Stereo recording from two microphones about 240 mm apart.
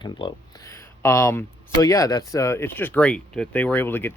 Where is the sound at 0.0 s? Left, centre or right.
Centre.